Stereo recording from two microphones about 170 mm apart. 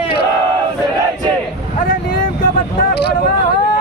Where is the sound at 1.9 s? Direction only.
55° left (ahead or behind); by 3.1 s 70° left (ahead or behind).